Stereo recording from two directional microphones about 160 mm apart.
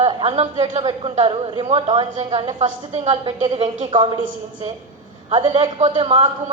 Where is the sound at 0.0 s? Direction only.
30° right (ahead or behind).